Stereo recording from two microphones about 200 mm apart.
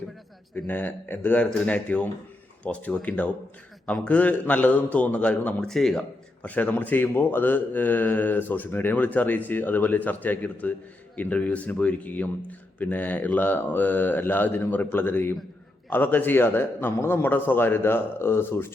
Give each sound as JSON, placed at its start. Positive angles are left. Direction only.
{"t": 0.5, "sound": "a man's voice", "side_deg": 10}